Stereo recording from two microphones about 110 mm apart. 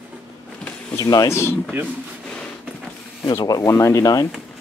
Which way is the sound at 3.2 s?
30° left (ahead or behind).